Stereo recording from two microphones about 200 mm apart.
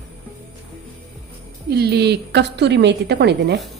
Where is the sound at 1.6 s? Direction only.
55° right (ahead or behind).